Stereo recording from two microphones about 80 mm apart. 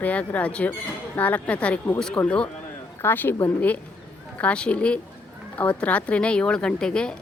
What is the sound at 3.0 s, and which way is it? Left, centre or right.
Speech, left.